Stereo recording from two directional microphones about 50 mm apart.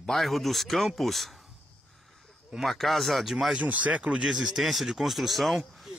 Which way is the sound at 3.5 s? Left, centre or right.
Right.